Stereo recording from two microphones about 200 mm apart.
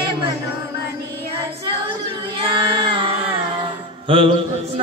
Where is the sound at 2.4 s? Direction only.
25° right (ahead or behind).